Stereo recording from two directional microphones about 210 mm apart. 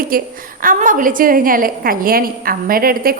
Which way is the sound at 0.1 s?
40° right (ahead or behind).